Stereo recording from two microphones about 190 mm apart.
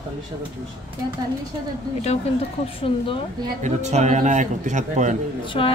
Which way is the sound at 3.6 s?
35° right (ahead or behind).